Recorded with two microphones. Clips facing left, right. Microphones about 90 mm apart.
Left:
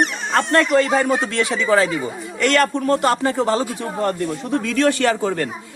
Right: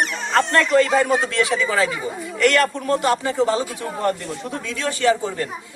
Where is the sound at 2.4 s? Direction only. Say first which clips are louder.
Left 1 dB; 35° left (ahead or behind).